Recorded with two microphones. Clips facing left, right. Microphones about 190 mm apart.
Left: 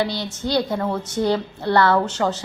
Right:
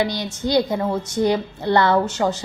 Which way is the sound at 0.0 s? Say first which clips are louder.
Right 1 dB; 15° right (ahead or behind).